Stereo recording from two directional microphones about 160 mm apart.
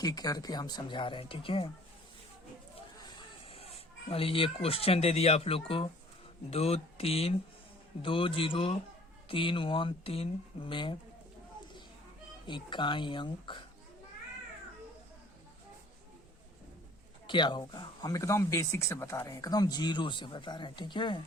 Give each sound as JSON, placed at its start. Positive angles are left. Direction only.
{"t": 0.0, "sound": "speech", "side_deg": 25}
{"t": 3.4, "sound": "speech", "side_deg": 40}
{"t": 12.5, "sound": "speech", "side_deg": 30}
{"t": 17.2, "sound": "speech", "side_deg": 30}